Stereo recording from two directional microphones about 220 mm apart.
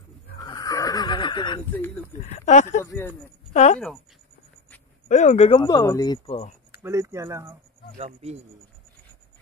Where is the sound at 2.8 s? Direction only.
10° left (ahead or behind).